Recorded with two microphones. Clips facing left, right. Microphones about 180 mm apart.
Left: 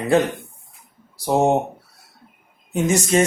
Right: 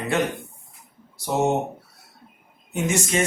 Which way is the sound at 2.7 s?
35° left (ahead or behind).